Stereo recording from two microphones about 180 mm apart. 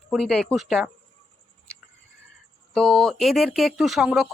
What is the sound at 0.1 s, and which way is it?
Speech, centre (ahead or behind).